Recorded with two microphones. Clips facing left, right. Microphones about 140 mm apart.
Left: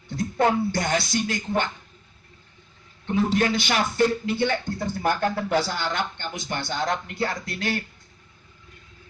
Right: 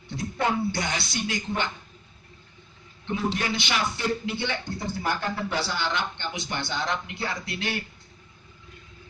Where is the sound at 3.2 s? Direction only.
45° left (ahead or behind).